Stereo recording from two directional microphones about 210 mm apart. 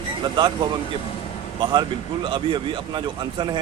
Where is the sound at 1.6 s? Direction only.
20° right (ahead or behind).